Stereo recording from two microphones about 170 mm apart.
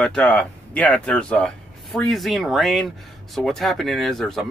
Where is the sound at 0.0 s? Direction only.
5° left (ahead or behind).